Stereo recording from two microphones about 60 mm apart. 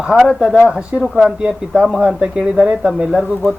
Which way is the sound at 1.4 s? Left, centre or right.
Centre.